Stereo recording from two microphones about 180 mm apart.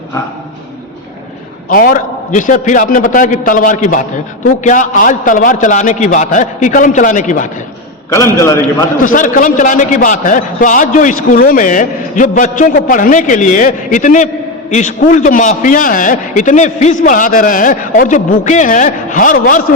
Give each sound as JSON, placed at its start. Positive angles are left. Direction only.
{"t": 1.7, "sound": "a man's voice", "side_deg": 50}
{"t": 8.1, "sound": "a man's voice", "side_deg": 15}
{"t": 9.0, "sound": "a man's voice", "side_deg": 45}